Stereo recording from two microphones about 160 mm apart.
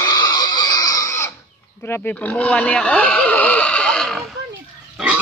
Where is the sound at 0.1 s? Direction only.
25° left (ahead or behind).